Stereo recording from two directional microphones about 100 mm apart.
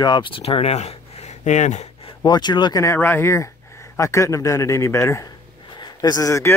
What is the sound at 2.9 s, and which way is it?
A man's voice, 20° left (ahead or behind).